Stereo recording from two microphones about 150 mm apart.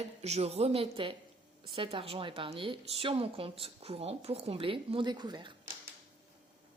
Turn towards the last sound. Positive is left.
turn(degrees=-30)  # may be behind; listen again after turning